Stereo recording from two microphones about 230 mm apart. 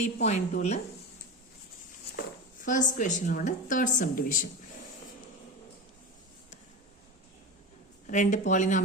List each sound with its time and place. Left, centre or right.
0.0 s a woman's voice: left
2.6 s a woman's voice: left
8.0 s a woman's voice: left